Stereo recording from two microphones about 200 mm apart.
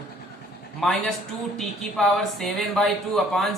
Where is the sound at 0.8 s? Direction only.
Centre (ahead or behind).